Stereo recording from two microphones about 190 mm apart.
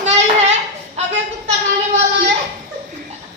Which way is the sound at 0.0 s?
35° right (ahead or behind).